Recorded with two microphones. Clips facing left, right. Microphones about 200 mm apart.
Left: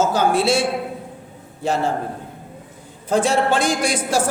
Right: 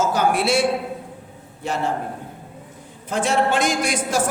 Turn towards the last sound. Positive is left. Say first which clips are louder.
# left 2 dB
turn(degrees=30)  # may be behind; listen again after turning